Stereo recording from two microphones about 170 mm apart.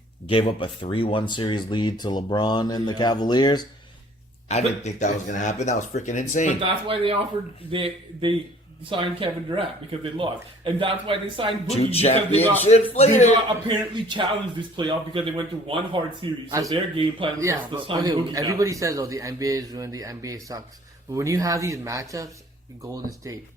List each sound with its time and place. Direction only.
0.3 s speech: 30° left (ahead or behind)
4.4 s speech: 40° left (ahead or behind)
6.8 s speech: 30° right (ahead or behind)
11.7 s speech: 35° left (ahead or behind)
13.7 s speech: 30° right (ahead or behind)
16.5 s speech: 20° right (ahead or behind)
16.7 s speech: 30° right (ahead or behind)